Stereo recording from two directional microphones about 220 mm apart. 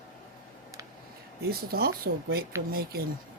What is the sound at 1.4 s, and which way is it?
Speech, 45° right (ahead or behind).